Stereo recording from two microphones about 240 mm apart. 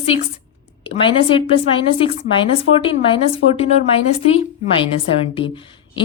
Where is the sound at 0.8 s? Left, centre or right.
Left.